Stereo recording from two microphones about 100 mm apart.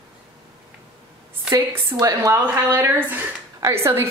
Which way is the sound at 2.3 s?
20° right (ahead or behind).